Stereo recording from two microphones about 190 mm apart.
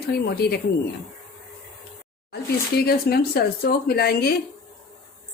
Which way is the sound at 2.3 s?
55° left (ahead or behind).